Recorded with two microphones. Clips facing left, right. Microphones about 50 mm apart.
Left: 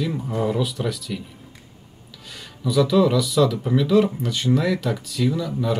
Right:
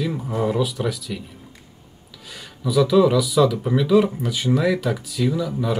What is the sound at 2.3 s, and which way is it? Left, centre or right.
Speech, centre.